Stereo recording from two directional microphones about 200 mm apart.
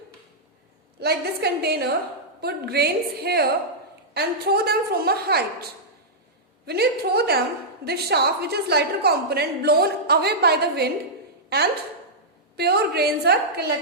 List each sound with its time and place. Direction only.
0.9 s a woman's voice: 55° right (ahead or behind)
6.7 s a woman's voice: 55° right (ahead or behind)